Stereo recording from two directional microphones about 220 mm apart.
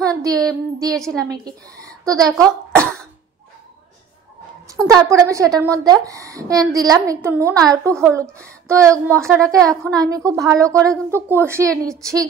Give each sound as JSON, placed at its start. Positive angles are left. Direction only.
{"t": 0.0, "sound": "a woman's voice", "side_deg": -15}
{"t": 0.9, "sound": "a woman's voice", "side_deg": 0}
{"t": 1.2, "sound": "a woman's voice", "side_deg": -15}
{"t": 2.4, "sound": "cough", "side_deg": 5}
{"t": 5.0, "sound": "a woman's voice", "side_deg": -15}
{"t": 9.2, "sound": "a woman's voice", "side_deg": 5}
{"t": 9.9, "sound": "a woman's voice", "side_deg": -15}